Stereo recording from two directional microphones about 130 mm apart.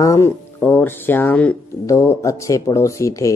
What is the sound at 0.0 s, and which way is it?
Speech, 25° left (ahead or behind).